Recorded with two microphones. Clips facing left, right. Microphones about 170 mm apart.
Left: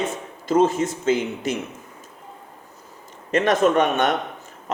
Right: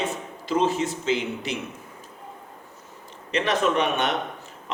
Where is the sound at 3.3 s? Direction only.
50° left (ahead or behind).